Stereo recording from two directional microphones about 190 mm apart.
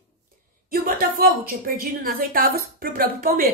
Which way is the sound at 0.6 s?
50° right (ahead or behind).